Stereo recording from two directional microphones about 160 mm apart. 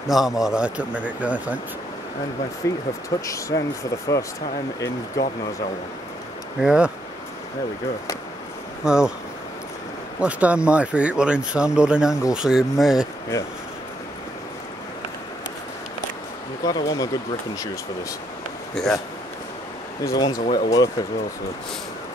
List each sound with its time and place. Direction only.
0.1 s speech: centre (ahead or behind)
2.6 s speech: 20° left (ahead or behind)
4.7 s speech: 20° left (ahead or behind)
6.6 s speech: 5° right (ahead or behind)
8.8 s speech: 5° right (ahead or behind)
10.2 s speech: 5° right (ahead or behind)
16.6 s speech: 25° left (ahead or behind)
18.8 s speech: centre (ahead or behind)
20.1 s speech: 25° left (ahead or behind)